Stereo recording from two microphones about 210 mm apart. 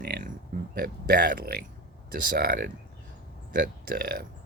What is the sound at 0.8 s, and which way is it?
Speech, 45° right (ahead or behind).